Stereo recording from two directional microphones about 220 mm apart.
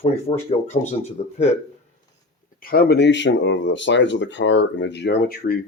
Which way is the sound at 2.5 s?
40° left (ahead or behind).